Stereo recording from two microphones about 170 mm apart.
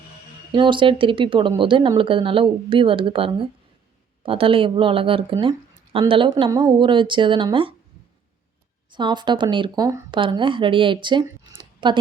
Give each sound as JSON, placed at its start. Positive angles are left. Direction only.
{"t": 0.5, "sound": "speech", "side_deg": -30}
{"t": 8.9, "sound": "speech", "side_deg": -25}